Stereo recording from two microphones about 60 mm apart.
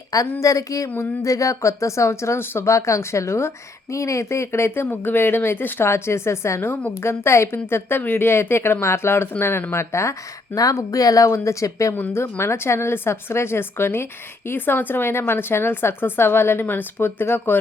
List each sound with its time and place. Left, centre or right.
0.1 s speech: left
4.9 s speech: left
9.7 s speech: left
10.6 s speech: left
12.1 s speech: left